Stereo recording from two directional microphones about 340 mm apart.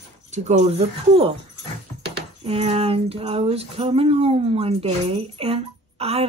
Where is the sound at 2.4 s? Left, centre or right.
Centre.